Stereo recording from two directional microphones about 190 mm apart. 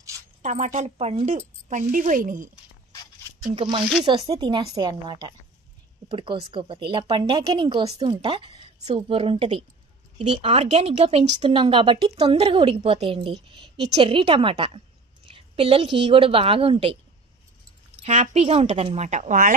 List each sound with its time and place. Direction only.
0.4 s speech: 40° right (ahead or behind)
3.5 s speech: 25° right (ahead or behind)
18.0 s speech: 35° right (ahead or behind)